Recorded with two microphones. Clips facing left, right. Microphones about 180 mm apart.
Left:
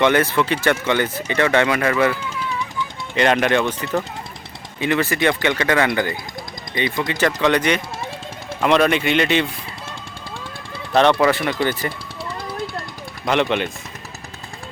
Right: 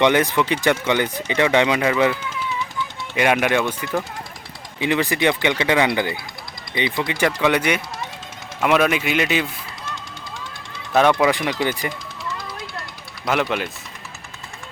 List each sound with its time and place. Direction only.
0.0 s speech: 15° right (ahead or behind)
3.2 s a man's voice: 10° right (ahead or behind)
10.9 s speech: 10° right (ahead or behind)
13.2 s a man's voice: 5° right (ahead or behind)